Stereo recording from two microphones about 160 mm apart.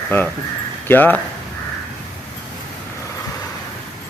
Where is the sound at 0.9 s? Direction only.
10° left (ahead or behind).